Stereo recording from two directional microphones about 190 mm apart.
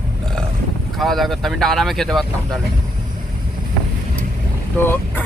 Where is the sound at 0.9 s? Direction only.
Centre (ahead or behind).